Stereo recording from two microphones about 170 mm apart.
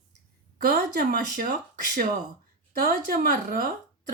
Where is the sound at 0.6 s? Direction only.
60° right (ahead or behind).